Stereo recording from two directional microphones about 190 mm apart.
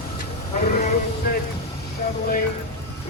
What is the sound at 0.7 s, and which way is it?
Speech, 50° left (ahead or behind).